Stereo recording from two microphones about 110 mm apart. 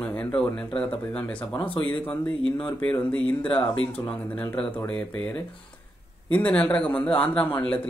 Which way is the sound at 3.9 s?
60° left (ahead or behind).